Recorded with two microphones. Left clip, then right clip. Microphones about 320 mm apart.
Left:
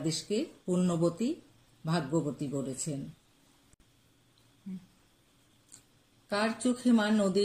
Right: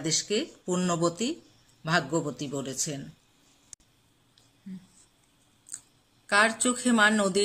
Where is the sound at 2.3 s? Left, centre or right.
Right.